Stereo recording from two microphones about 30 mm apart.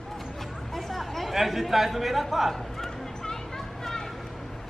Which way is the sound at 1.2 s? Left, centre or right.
Centre.